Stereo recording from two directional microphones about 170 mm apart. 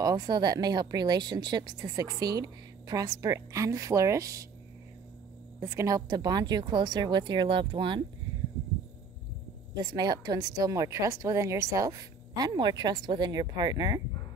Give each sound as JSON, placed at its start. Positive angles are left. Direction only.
{"t": 0.0, "sound": "a woman's voice", "side_deg": -20}
{"t": 5.6, "sound": "a woman's voice", "side_deg": -15}
{"t": 9.8, "sound": "a woman's voice", "side_deg": -25}